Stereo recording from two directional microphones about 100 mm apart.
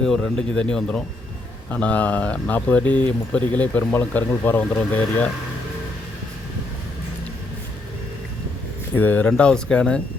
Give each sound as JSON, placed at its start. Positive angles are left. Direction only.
{"t": 0.0, "sound": "speech", "side_deg": 5}
{"t": 9.0, "sound": "speech", "side_deg": 15}